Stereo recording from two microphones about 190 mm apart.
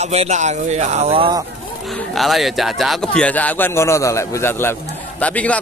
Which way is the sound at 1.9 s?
Centre (ahead or behind).